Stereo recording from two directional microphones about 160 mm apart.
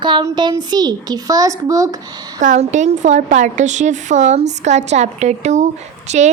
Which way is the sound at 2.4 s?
50° right (ahead or behind).